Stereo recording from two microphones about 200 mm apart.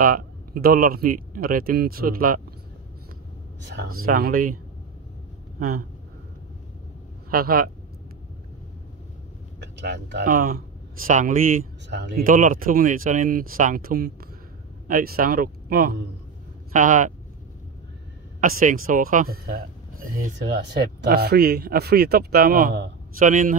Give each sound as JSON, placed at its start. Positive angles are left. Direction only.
{"t": 0.0, "sound": "speech", "side_deg": -45}
{"t": 3.7, "sound": "speech", "side_deg": -50}
{"t": 5.6, "sound": "speech", "side_deg": -45}
{"t": 7.2, "sound": "speech", "side_deg": -45}
{"t": 9.6, "sound": "a sound", "side_deg": -60}
{"t": 10.2, "sound": "speech", "side_deg": -45}
{"t": 11.9, "sound": "speech", "side_deg": -55}
{"t": 18.4, "sound": "speech", "side_deg": -40}